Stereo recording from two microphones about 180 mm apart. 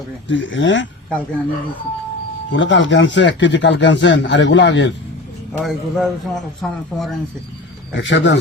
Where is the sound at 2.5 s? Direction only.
90° left.